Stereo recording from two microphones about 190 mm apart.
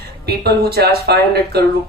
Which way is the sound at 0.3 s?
55° right (ahead or behind).